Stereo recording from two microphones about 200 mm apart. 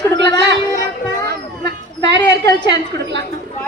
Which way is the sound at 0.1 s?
60° right (ahead or behind).